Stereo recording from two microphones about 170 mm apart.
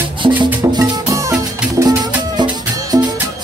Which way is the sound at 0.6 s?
20° right (ahead or behind).